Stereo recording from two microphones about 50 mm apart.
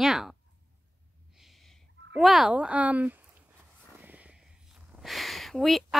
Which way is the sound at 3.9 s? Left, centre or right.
Right.